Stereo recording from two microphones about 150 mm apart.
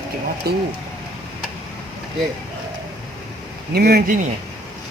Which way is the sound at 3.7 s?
90° right.